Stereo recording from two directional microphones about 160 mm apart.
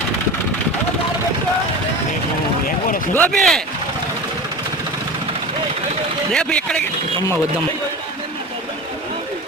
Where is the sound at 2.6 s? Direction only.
60° left (ahead or behind).